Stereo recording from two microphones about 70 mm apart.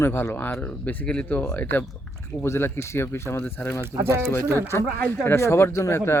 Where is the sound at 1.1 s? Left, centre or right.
Centre.